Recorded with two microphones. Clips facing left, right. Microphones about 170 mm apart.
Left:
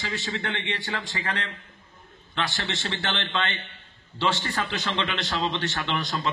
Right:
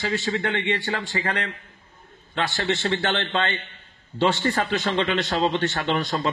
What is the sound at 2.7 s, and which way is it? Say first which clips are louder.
A man's voice: right 7 dB; 45° right (ahead or behind).